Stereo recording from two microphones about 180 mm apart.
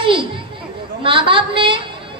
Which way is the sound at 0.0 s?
30° right (ahead or behind).